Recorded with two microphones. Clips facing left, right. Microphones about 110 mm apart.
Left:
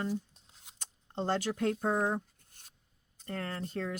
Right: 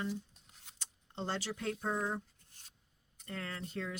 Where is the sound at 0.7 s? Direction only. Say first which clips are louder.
Left 6 dB; 50° left (ahead or behind).